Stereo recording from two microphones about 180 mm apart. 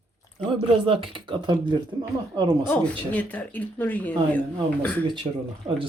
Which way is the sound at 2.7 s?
10° left (ahead or behind).